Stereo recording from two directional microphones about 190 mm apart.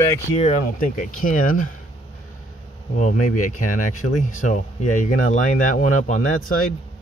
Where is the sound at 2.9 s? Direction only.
45° left (ahead or behind).